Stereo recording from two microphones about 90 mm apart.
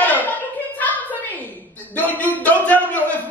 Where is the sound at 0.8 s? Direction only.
20° left (ahead or behind).